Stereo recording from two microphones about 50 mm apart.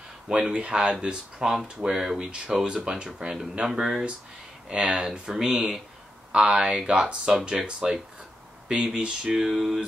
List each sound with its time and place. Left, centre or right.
0.3 s speech: centre
7.3 s speech: centre